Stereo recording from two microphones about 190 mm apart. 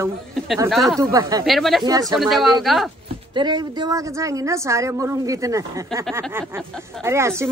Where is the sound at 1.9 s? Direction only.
20° right (ahead or behind).